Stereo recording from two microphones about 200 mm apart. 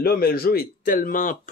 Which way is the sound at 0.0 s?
50° left (ahead or behind).